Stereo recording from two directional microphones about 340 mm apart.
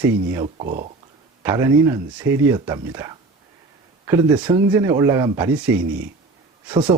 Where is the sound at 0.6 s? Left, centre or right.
Right.